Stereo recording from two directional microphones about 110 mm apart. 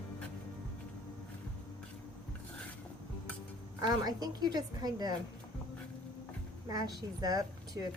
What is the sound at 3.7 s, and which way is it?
Speech, 35° right (ahead or behind).